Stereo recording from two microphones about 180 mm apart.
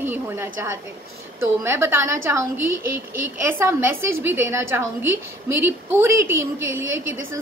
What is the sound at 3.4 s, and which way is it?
Speech, 15° right (ahead or behind).